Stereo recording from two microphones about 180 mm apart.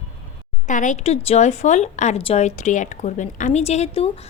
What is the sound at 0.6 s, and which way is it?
Speech, 45° left (ahead or behind).